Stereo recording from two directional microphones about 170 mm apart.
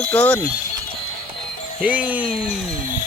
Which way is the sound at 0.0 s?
10° left (ahead or behind).